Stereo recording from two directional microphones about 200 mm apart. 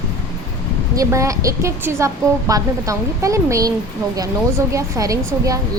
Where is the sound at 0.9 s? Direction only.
15° right (ahead or behind).